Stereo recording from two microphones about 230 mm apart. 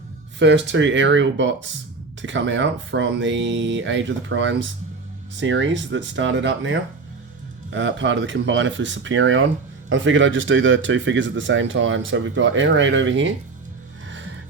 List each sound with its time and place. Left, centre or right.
0.3 s speech: right
14.1 s music: right